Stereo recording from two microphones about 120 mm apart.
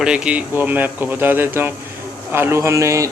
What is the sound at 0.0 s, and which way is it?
A man's voice, 5° right (ahead or behind).